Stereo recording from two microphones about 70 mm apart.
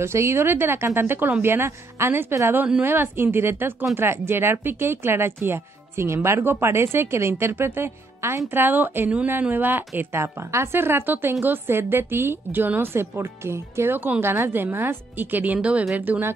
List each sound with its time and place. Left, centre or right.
0.0 s speech: right
10.2 s speech: right; by 16.0 s centre
16.0 s speech: right